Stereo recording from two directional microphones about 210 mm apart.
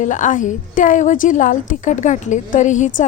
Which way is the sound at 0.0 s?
35° left (ahead or behind).